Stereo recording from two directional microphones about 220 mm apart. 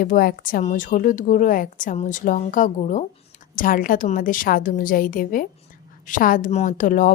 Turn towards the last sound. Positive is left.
turn(degrees=35)  # may be behind; listen again after turning